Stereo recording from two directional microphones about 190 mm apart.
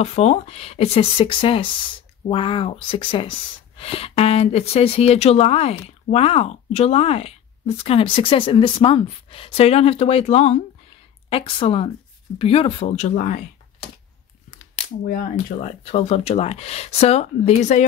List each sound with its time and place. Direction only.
0.0 s a woman's voice: 35° left (ahead or behind)
15.6 s speech: 35° left (ahead or behind)